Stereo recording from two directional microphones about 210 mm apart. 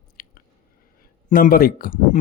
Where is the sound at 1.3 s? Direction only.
45° left (ahead or behind).